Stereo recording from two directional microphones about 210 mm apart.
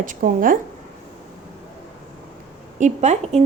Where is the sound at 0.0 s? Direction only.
40° right (ahead or behind).